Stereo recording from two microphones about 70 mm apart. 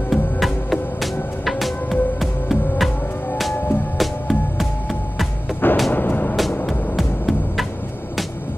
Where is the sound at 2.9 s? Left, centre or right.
Left.